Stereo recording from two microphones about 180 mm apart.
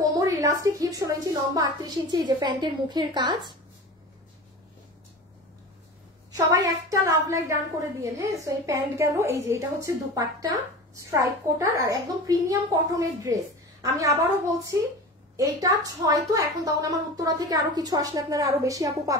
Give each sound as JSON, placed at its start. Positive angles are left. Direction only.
{"t": 0.0, "sound": "a woman's voice", "side_deg": -20}
{"t": 6.3, "sound": "a woman's voice", "side_deg": -20}
{"t": 15.3, "sound": "a woman's voice", "side_deg": -20}